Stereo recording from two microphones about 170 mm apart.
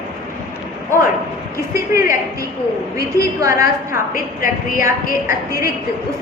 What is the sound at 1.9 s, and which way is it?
Speech, 15° right (ahead or behind).